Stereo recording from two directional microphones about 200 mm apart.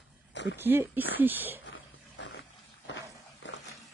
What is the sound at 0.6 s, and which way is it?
Speech, 10° right (ahead or behind).